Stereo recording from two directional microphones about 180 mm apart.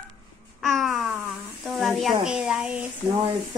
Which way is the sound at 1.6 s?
Centre (ahead or behind).